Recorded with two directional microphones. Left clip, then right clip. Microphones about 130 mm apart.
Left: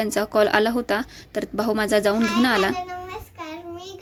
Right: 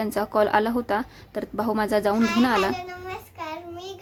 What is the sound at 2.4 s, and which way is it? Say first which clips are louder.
Speech: left 3 dB; 20° left (ahead or behind).